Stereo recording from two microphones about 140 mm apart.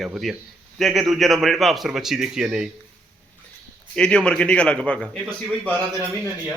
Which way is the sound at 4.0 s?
5° left (ahead or behind).